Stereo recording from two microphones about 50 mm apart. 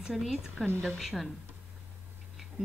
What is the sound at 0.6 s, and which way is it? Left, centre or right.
Speech, centre.